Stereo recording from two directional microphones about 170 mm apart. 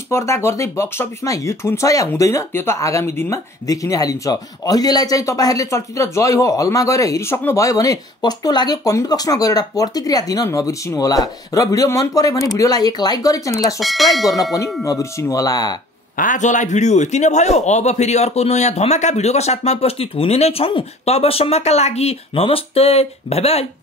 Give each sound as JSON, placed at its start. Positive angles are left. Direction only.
{"t": 0.1, "sound": "speech", "side_deg": 15}
{"t": 13.7, "sound": "speech", "side_deg": 0}
{"t": 14.9, "sound": "speech", "side_deg": 20}
{"t": 16.2, "sound": "speech", "side_deg": 45}